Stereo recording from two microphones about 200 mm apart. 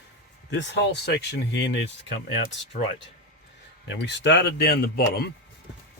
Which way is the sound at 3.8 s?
60° left (ahead or behind).